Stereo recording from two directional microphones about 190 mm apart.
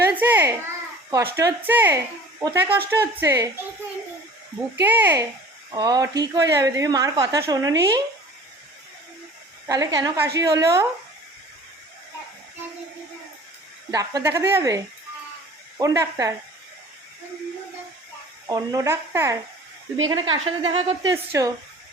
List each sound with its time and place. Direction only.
0.0 s a sound: 10° right (ahead or behind)
1.1 s speech: 15° right (ahead or behind)
4.8 s a woman's voice: 10° right (ahead or behind)
9.6 s a woman's voice: 20° right (ahead or behind)
13.9 s speech: 15° right (ahead or behind)
15.8 s speech: 15° right (ahead or behind)
18.4 s speech: 20° right (ahead or behind)
20.1 s a woman's voice: 25° right (ahead or behind)